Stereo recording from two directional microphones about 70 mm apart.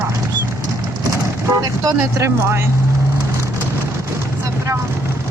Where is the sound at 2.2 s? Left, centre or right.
Right.